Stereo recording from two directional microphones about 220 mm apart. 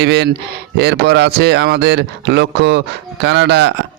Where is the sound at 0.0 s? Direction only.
50° right (ahead or behind).